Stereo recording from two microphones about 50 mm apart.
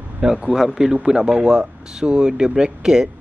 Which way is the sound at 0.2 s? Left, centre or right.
Centre.